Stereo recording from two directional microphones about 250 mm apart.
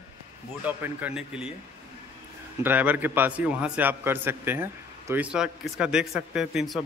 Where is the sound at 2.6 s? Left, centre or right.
Centre.